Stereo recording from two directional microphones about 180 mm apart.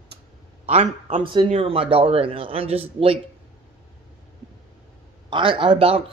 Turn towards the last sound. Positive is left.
turn(degrees=-30)  # may be behind; listen again after turning